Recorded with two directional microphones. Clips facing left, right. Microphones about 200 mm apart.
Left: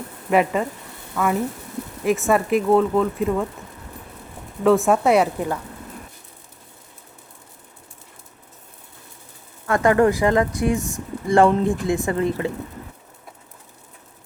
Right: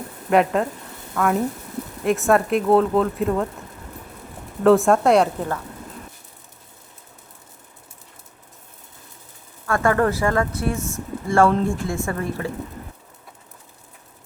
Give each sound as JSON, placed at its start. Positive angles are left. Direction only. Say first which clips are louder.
{"t": 0.3, "sound": "speech", "louder": "right 1 dB", "side_deg": 0}
{"t": 4.6, "sound": "speech", "louder": "right 2 dB", "side_deg": 0}
{"t": 9.6, "sound": "speech", "louder": "left 3 dB", "side_deg": 20}